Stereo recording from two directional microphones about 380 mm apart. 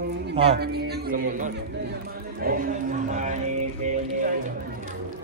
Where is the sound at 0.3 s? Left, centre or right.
Centre.